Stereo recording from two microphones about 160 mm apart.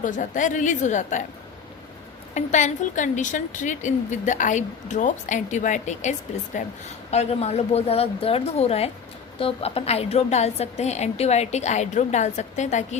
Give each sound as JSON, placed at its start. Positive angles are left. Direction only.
{"t": 0.0, "sound": "a woman's voice", "side_deg": 50}
{"t": 2.3, "sound": "a woman's voice", "side_deg": 50}